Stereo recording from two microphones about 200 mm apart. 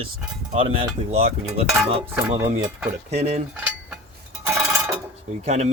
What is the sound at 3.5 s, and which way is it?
Cutlery, 5° right (ahead or behind).